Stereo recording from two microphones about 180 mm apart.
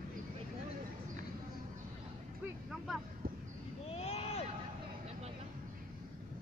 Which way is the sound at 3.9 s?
35° left (ahead or behind).